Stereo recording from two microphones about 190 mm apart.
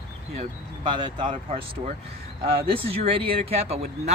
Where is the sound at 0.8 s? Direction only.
25° right (ahead or behind).